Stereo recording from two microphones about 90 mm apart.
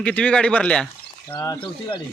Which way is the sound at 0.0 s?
15° left (ahead or behind).